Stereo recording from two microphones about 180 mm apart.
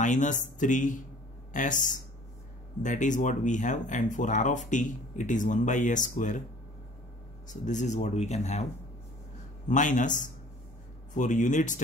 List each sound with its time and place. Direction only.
0.0 s speech: 45° left (ahead or behind)
7.4 s speech: 45° left (ahead or behind)
9.7 s speech: 45° left (ahead or behind)